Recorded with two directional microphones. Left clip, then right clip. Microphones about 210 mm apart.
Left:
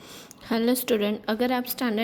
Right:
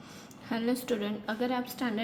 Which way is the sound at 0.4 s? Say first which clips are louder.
Left 7 dB; 45° left (ahead or behind).